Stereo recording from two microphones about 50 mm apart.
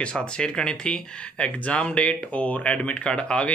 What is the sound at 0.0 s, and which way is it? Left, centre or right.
Speech, centre.